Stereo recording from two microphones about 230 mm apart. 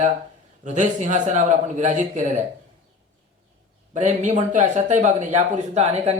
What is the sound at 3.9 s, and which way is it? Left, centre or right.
Speech, right.